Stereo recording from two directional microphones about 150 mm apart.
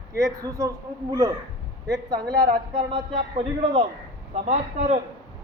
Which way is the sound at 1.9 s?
25° right (ahead or behind).